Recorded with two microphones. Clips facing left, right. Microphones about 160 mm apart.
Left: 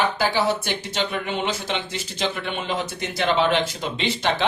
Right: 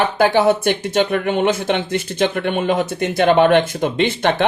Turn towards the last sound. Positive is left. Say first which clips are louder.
# right 7 dB
turn(degrees=-55)  # may be behind; listen again after turning